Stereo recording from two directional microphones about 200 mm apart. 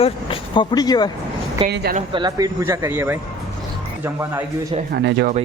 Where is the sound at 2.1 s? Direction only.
20° right (ahead or behind).